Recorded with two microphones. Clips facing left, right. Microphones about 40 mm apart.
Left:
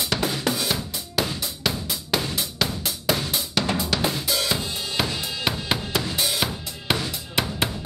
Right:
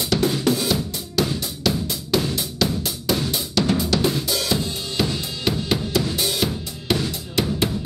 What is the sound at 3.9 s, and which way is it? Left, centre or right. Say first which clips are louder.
Drum kit: right 3 dB; centre.